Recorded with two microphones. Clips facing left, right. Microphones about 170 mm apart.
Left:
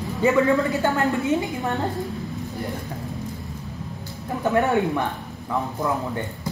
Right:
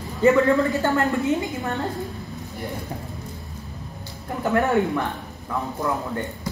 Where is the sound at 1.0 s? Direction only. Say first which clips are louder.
Right 1 dB; 20° left (ahead or behind).